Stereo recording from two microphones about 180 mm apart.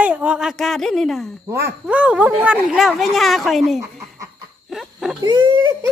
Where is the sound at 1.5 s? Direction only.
15° right (ahead or behind).